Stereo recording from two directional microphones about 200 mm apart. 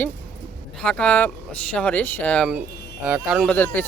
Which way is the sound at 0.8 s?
5° left (ahead or behind).